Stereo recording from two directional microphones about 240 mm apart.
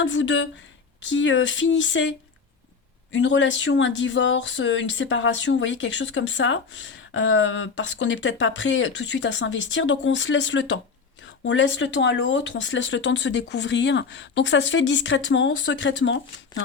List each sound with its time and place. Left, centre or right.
0.0 s speech: left